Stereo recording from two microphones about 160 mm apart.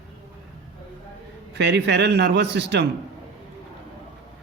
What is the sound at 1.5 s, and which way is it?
A man's voice, 90° right.